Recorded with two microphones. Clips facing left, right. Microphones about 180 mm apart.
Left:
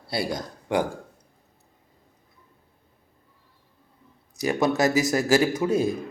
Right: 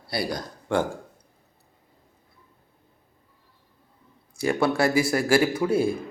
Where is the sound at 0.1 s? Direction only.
25° left (ahead or behind).